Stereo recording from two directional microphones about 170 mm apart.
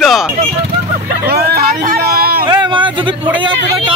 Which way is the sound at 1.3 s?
65° right (ahead or behind).